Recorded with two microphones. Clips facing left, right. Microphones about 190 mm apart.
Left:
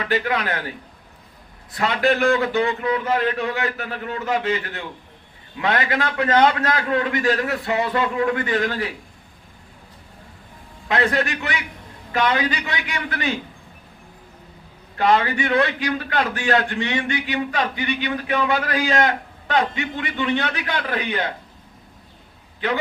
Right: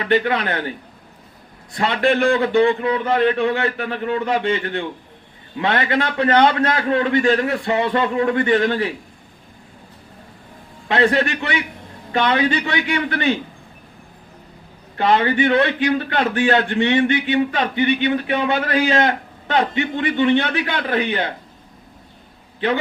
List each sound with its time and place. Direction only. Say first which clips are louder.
0.1 s a man's voice: right 5 dB; 30° right (ahead or behind)
1.7 s a man's voice: right 2 dB; 30° right (ahead or behind)
10.8 s a man's voice: right 4 dB; 30° right (ahead or behind)
14.9 s a man's voice: right 2 dB; 25° right (ahead or behind)